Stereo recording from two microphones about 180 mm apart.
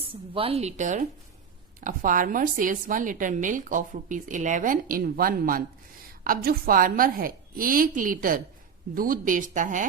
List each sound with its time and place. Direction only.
0.1 s a woman's voice: 30° right (ahead or behind); by 9.8 s 45° right (ahead or behind)